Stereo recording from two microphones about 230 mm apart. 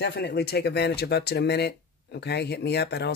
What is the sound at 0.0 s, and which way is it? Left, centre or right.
Speech, left.